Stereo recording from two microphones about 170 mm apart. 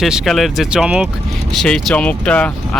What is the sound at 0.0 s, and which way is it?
Speech, centre (ahead or behind).